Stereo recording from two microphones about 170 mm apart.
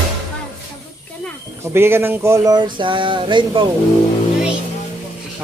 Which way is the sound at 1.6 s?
15° right (ahead or behind).